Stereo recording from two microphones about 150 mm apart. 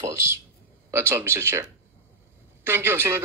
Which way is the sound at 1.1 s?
15° right (ahead or behind).